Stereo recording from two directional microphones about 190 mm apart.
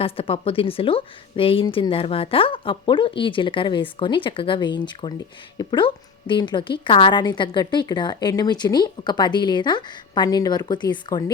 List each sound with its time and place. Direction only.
0.0 s speech: 30° left (ahead or behind)